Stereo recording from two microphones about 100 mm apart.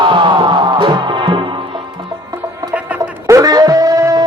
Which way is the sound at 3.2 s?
35° right (ahead or behind).